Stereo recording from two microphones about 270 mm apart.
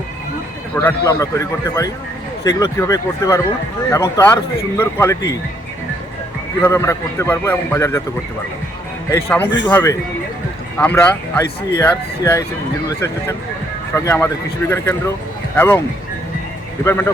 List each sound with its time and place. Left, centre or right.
0.8 s speech: centre
6.6 s speech: centre
9.0 s speech: centre
13.9 s speech: centre
15.5 s speech: centre
16.8 s speech: centre